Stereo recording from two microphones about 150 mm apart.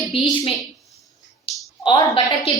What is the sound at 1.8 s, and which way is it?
Speech, 35° left (ahead or behind).